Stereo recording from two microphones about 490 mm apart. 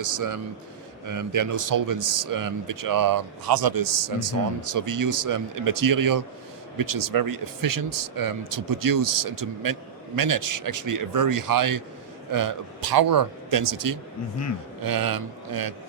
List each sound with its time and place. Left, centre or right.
0.0 s a man's voice: right